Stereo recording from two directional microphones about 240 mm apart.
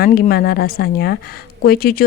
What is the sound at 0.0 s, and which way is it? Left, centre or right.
A woman's voice, left.